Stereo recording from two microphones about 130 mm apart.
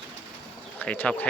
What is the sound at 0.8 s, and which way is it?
Speech, 10° left (ahead or behind).